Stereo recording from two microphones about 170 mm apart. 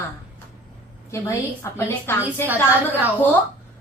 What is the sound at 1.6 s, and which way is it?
Speech, 15° left (ahead or behind).